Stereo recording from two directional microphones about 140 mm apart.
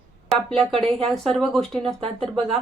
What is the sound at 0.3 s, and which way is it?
Speech, 5° left (ahead or behind).